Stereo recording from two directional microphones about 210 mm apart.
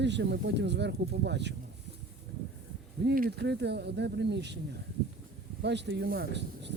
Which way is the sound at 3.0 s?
45° right (ahead or behind).